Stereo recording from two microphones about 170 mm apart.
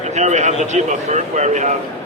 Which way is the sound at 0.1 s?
45° right (ahead or behind).